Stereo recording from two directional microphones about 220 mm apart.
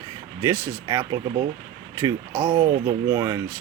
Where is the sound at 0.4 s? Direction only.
10° right (ahead or behind).